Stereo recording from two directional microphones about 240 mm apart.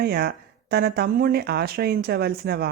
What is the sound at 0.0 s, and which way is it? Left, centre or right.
Speech, right.